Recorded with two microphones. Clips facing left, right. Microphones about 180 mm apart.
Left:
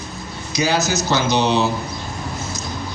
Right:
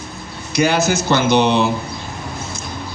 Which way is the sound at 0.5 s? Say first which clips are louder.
Right 3 dB; 55° right (ahead or behind).